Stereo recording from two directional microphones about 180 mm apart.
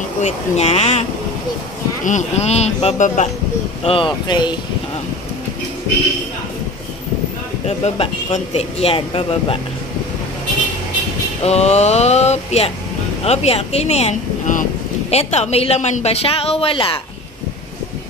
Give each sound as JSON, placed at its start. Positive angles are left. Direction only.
{"t": 0.2, "sound": "speech", "side_deg": 35}
{"t": 2.0, "sound": "speech", "side_deg": 40}
{"t": 7.6, "sound": "speech", "side_deg": 35}
{"t": 11.4, "sound": "speech", "side_deg": 35}